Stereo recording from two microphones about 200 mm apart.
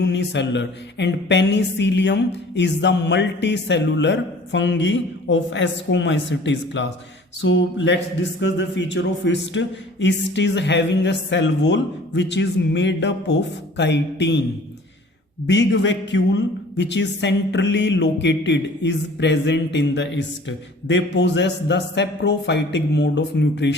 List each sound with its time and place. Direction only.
0.0 s a man's voice: 60° left (ahead or behind)
15.4 s a man's voice: 60° left (ahead or behind)